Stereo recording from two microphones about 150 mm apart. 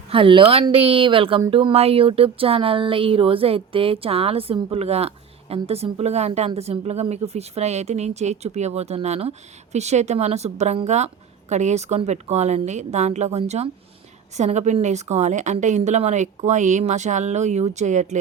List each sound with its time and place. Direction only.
0.1 s a woman's voice: 35° right (ahead or behind); by 18.2 s 50° right (ahead or behind)